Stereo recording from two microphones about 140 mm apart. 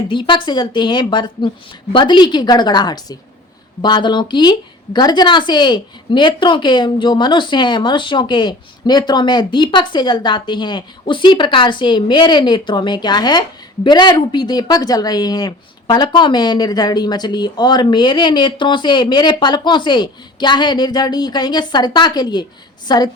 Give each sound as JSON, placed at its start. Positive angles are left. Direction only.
{"t": 0.1, "sound": "speech", "side_deg": 35}